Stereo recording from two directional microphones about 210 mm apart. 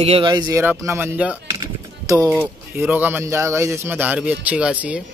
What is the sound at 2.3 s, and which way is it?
Speech, 10° right (ahead or behind).